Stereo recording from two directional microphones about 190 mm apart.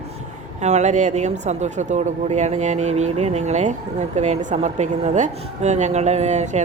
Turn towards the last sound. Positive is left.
turn(degrees=-35)  # may be behind; listen again after turning